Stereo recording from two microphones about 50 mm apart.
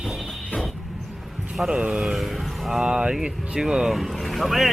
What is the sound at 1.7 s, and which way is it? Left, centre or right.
Speech, centre.